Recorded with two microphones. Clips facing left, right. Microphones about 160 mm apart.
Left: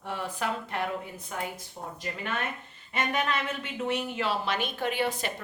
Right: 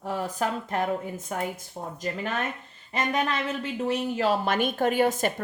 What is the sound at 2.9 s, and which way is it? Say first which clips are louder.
A woman's voice: right 2 dB; 35° right (ahead or behind).